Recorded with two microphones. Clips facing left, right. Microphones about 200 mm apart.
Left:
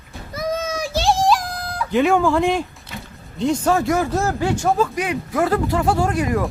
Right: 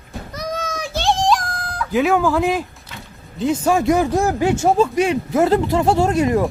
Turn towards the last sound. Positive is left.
turn(degrees=-25)  # may be behind; listen again after turning